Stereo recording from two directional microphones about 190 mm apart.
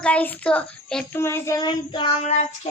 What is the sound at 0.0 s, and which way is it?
A child's voice, 5° left (ahead or behind).